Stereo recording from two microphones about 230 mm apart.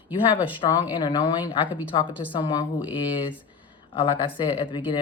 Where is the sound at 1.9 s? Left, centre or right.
Left.